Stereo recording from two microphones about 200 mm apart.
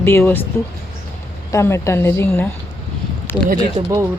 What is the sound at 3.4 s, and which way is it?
Speech, 45° right (ahead or behind).